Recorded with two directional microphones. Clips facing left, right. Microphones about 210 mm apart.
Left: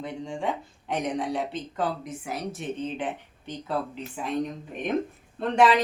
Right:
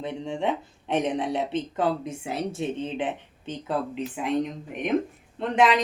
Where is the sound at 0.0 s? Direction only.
20° right (ahead or behind).